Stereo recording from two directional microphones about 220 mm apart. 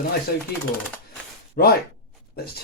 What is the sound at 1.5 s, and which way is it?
Speech, 45° left (ahead or behind).